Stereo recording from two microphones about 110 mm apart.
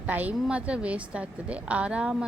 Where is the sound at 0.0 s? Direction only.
15° right (ahead or behind).